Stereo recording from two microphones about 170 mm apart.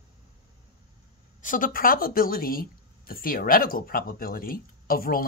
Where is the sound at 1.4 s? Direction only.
50° left (ahead or behind).